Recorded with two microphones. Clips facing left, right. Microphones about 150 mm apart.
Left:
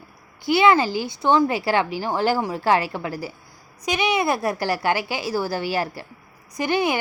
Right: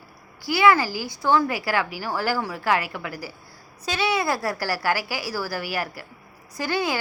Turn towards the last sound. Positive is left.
turn(degrees=20)  # may be behind; listen again after turning